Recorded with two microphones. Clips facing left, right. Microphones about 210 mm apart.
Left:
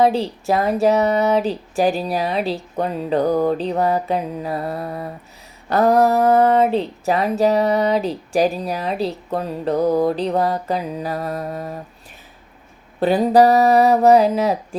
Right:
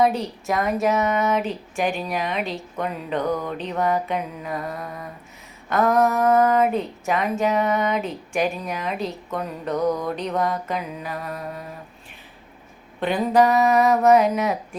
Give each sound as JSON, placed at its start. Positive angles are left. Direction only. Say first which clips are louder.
{"t": 0.0, "sound": "speech", "louder": "left 4 dB", "side_deg": 30}
{"t": 13.0, "sound": "speech", "louder": "left 5 dB", "side_deg": 35}